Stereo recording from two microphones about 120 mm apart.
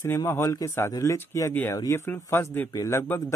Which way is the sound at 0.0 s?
20° left (ahead or behind).